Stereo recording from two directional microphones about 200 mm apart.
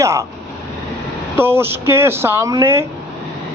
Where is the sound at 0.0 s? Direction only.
15° right (ahead or behind).